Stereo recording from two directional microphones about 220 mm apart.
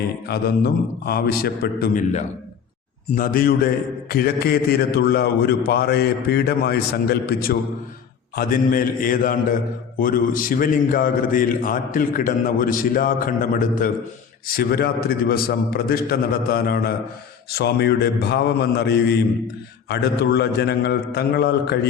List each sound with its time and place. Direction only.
0.3 s a man's voice: 45° left (ahead or behind)